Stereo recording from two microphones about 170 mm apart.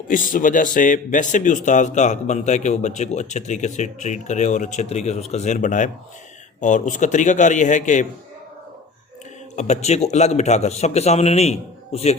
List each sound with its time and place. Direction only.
0.1 s speech: 50° left (ahead or behind)
9.6 s a man's voice: 40° left (ahead or behind)